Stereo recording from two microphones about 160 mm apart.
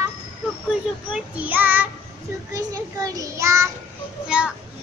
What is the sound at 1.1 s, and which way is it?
Child singing, 10° right (ahead or behind).